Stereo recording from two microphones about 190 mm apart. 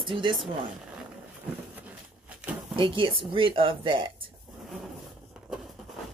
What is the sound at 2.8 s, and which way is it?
Speech, 25° right (ahead or behind).